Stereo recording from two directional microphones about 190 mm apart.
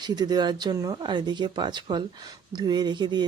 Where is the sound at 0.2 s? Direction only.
20° right (ahead or behind).